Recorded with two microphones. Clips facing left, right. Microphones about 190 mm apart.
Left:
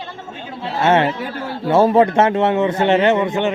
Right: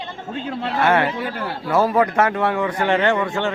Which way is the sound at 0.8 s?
25° left (ahead or behind).